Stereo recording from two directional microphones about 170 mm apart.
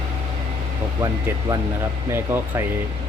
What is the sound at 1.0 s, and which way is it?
Speech, 20° right (ahead or behind).